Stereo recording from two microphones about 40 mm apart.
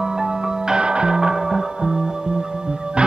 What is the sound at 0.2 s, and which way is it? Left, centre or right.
Music, right.